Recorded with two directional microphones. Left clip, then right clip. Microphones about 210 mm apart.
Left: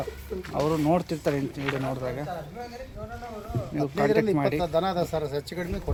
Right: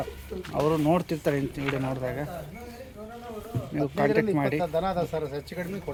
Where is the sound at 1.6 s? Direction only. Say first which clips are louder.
Even; 10° left (ahead or behind).